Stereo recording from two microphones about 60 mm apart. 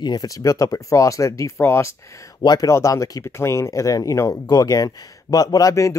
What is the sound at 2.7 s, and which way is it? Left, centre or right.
Speech, left.